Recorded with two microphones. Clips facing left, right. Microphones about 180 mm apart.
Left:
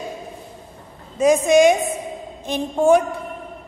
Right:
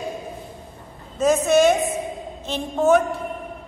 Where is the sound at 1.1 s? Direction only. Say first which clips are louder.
Left 3 dB; 15° left (ahead or behind).